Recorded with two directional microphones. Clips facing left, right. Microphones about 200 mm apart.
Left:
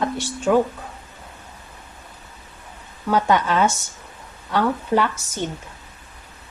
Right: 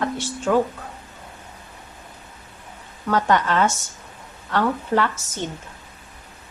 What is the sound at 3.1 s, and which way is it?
Speech, 10° left (ahead or behind).